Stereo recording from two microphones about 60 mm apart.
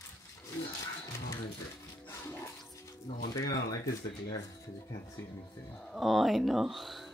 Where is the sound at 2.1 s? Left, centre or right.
Left.